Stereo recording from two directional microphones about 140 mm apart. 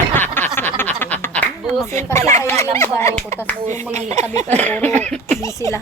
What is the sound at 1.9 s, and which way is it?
Speech, 20° left (ahead or behind).